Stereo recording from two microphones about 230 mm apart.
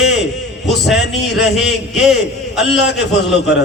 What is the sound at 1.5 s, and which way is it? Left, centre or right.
Speech, centre.